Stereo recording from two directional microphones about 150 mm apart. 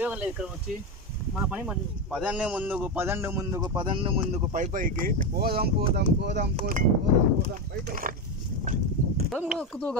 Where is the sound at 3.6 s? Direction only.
35° right (ahead or behind).